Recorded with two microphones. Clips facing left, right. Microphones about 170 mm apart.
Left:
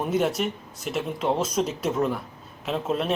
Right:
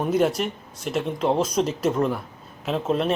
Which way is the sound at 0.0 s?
Centre (ahead or behind).